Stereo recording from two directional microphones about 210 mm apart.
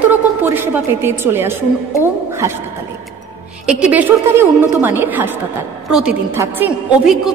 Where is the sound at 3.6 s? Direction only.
5° right (ahead or behind).